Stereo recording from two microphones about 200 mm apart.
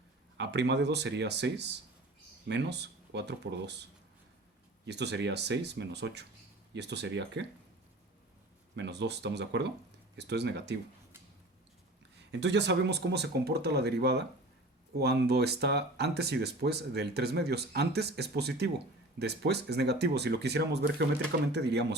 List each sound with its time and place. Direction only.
0.3 s speech: 60° right (ahead or behind)
4.9 s speech: 60° right (ahead or behind)
8.7 s speech: 60° right (ahead or behind)
12.3 s speech: 60° right (ahead or behind)